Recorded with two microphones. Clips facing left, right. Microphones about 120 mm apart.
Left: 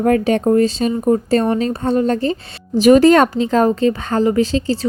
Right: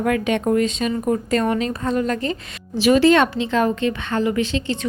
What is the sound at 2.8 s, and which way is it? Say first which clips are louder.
Speech: left 5 dB; 45° left (ahead or behind).